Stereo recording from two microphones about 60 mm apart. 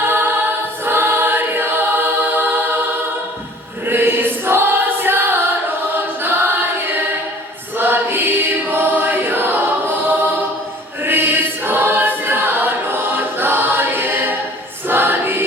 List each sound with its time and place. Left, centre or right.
0.9 s music: right
3.8 s choir: right